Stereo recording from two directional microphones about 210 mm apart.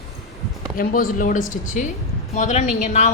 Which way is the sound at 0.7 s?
40° left (ahead or behind).